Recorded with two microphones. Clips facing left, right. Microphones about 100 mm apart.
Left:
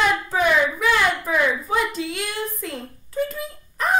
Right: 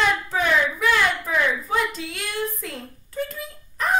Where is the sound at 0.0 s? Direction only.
5° left (ahead or behind).